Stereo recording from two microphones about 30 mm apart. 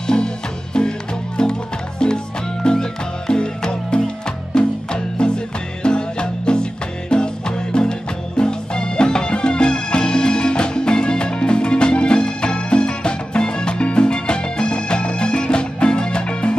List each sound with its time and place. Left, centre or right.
0.0 s music: left